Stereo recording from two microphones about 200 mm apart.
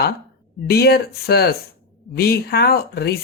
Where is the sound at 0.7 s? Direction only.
55° left (ahead or behind).